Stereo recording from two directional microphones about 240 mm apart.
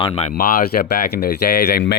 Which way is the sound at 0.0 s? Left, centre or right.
Left.